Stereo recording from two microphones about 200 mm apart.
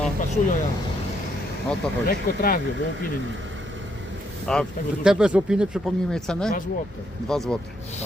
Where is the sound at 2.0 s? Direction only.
50° left (ahead or behind).